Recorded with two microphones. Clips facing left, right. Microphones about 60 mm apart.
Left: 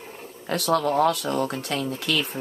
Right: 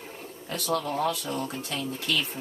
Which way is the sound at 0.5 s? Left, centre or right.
Left.